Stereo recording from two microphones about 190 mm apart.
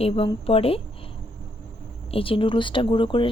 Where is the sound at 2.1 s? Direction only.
30° left (ahead or behind).